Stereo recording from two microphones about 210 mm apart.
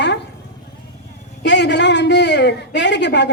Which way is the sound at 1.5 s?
55° left (ahead or behind).